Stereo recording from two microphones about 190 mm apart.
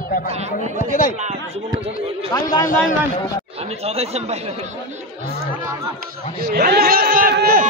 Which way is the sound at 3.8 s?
35° right (ahead or behind).